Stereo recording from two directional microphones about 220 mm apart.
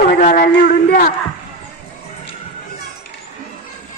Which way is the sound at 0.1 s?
35° left (ahead or behind).